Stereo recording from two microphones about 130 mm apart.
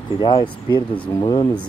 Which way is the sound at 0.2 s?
35° left (ahead or behind).